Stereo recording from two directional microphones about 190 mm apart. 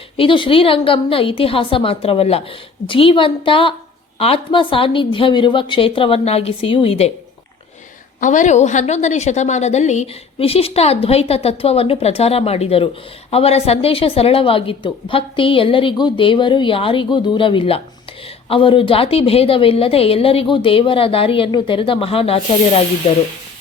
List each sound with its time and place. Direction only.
0.2 s a woman's voice: 25° left (ahead or behind)
8.2 s a woman's voice: 40° left (ahead or behind)